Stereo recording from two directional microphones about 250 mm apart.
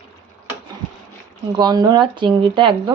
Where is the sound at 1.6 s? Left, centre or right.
Centre.